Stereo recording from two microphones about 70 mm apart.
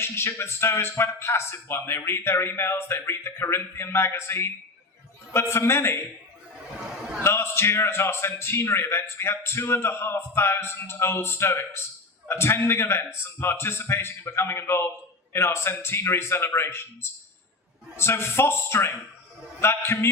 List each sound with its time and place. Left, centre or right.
0.0 s a man's voice: left
7.2 s a man's voice: left